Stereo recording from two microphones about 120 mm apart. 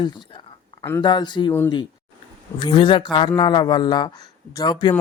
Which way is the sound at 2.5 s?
40° left (ahead or behind).